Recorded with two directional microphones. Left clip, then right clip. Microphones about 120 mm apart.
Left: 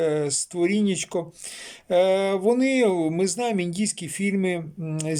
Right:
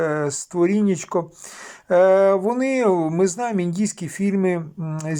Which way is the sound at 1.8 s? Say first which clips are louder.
Right 5 dB; 35° left (ahead or behind).